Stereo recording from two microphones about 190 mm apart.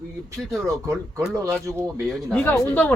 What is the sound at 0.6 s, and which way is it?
Speech, 15° right (ahead or behind).